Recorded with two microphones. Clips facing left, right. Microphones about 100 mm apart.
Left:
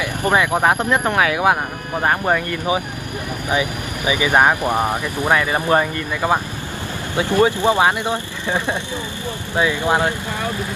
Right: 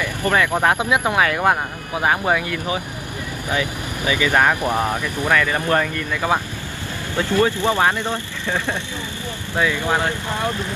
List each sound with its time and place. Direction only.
0.0 s a sound: 20° left (ahead or behind)
0.7 s speech: 10° right (ahead or behind)
1.2 s speech: 5° left (ahead or behind)
2.0 s speech: 5° right (ahead or behind)
3.4 s speech: 20° left (ahead or behind)
7.2 s speech: 15° left (ahead or behind)